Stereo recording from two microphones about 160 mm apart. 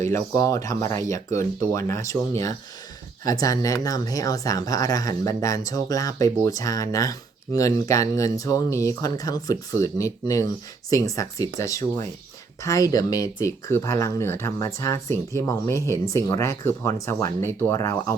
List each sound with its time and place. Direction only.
0.1 s speech: 20° left (ahead or behind)